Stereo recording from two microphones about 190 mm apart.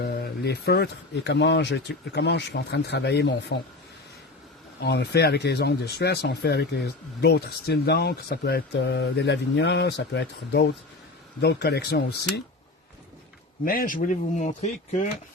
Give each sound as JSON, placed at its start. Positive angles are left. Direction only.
{"t": 0.0, "sound": "speech", "side_deg": 55}
{"t": 4.8, "sound": "speech", "side_deg": 60}
{"t": 13.7, "sound": "speech", "side_deg": 50}